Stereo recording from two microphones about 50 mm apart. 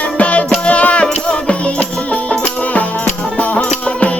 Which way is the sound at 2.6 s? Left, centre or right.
Left.